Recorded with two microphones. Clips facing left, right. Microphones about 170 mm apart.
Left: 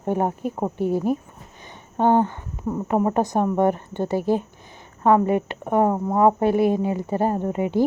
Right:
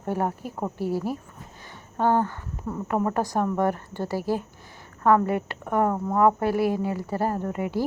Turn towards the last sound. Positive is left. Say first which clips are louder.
# left 5 dB
turn(degrees=20)  # may be behind; listen again after turning